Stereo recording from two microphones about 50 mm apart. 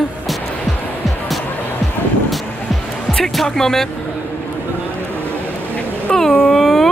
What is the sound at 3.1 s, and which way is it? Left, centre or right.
Speech, centre.